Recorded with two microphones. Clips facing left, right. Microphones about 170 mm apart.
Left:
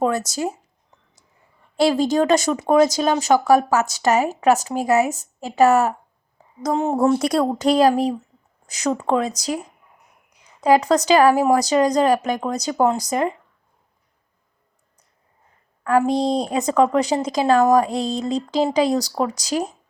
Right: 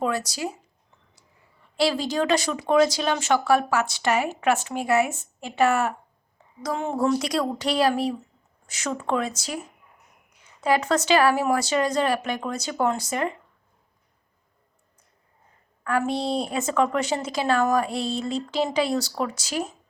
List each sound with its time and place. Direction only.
0.0 s speech: 45° left (ahead or behind)
1.7 s a woman's voice: 45° left (ahead or behind)
10.6 s a woman's voice: 35° left (ahead or behind)
15.8 s a woman's voice: 35° left (ahead or behind)